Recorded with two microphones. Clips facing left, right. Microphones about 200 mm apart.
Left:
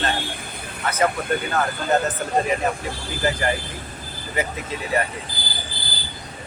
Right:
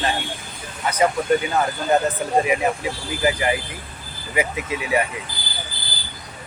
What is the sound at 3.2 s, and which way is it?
Speech, 10° right (ahead or behind).